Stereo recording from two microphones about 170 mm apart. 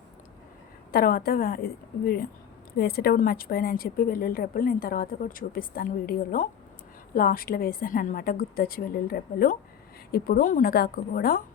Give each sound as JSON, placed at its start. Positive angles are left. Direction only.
{"t": 0.9, "sound": "a woman's voice", "side_deg": 60}